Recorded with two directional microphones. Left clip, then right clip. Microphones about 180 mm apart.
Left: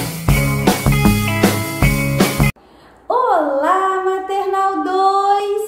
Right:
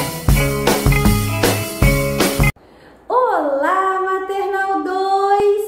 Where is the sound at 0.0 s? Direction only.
Centre (ahead or behind).